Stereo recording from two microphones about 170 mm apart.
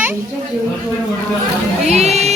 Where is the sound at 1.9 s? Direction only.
40° right (ahead or behind).